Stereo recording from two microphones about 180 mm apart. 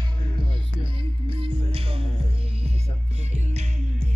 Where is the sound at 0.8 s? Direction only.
30° right (ahead or behind).